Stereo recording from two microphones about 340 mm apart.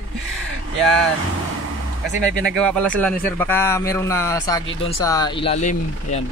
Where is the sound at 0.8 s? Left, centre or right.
Centre.